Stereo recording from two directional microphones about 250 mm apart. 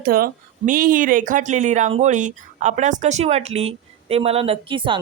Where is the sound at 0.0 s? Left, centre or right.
Right.